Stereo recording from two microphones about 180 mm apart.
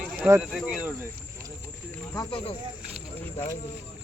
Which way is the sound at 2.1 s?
25° left (ahead or behind).